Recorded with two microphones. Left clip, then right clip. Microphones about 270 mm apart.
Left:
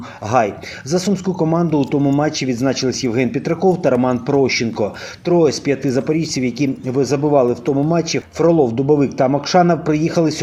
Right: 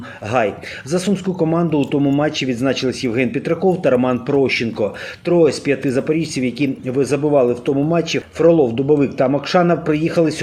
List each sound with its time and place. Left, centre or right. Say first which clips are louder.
0.3 s speech: left 2 dB; left